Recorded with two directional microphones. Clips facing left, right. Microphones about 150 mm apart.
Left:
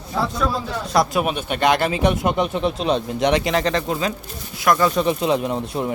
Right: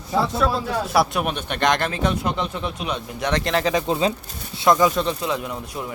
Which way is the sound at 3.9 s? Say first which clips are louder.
Right 2 dB; 25° right (ahead or behind).